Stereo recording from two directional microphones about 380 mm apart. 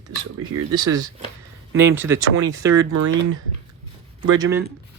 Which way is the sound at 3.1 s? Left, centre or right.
Right.